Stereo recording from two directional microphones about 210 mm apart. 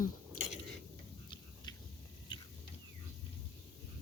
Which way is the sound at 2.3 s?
25° left (ahead or behind).